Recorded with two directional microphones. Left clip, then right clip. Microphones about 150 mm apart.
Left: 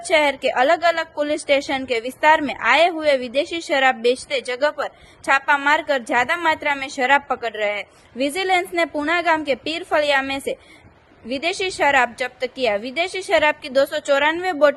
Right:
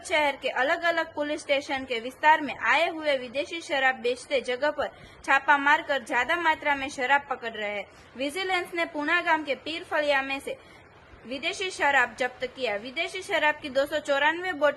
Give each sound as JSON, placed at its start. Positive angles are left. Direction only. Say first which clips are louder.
{"t": 0.1, "sound": "a woman's voice", "louder": "left 8 dB", "side_deg": 50}